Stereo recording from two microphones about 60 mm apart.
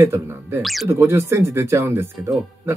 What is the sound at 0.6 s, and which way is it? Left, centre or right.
Speech, centre.